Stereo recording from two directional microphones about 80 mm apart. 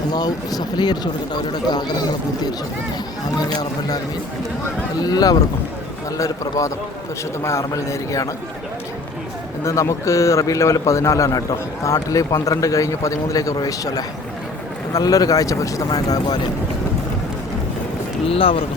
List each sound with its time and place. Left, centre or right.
0.1 s speech: left
3.5 s speech: left
9.6 s a man's voice: left